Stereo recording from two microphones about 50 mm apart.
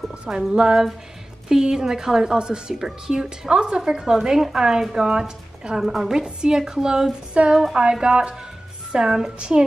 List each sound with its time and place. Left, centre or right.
0.1 s a woman's voice: centre